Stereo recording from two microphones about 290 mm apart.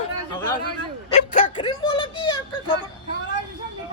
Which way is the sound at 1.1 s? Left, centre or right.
Left.